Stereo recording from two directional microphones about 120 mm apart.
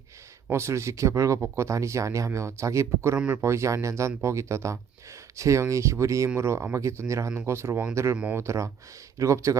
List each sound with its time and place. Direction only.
0.5 s speech: 25° right (ahead or behind)
3.2 s speech: 10° right (ahead or behind)
3.4 s speech: 25° right (ahead or behind)